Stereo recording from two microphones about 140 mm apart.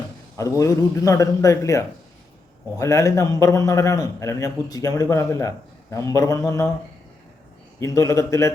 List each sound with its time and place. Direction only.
0.3 s a man's voice: 25° left (ahead or behind)
7.8 s a man's voice: 20° left (ahead or behind)